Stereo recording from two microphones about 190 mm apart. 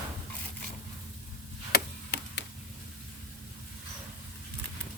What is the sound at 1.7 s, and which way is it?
Chop, 60° left (ahead or behind).